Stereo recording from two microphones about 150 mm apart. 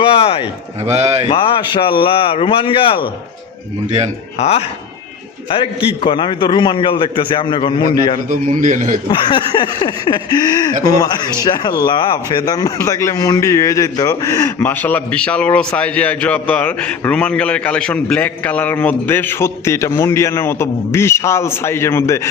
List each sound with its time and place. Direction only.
0.0 s a sound: 40° left (ahead or behind)
0.9 s speech: 45° right (ahead or behind)
1.3 s a man's voice: 35° left (ahead or behind)
4.4 s a man's voice: 45° left (ahead or behind)
8.3 s a man's voice: 60° right (ahead or behind)
9.0 s a man's voice: 30° left (ahead or behind)